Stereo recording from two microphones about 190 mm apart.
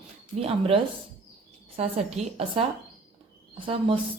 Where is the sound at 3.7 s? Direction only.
30° right (ahead or behind).